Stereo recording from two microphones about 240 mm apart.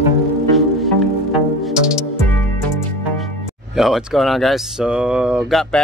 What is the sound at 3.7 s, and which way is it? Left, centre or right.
Speech, centre.